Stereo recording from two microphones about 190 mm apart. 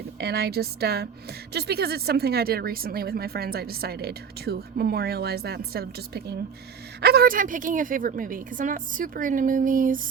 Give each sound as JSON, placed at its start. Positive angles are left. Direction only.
{"t": 0.2, "sound": "a woman's voice", "side_deg": -60}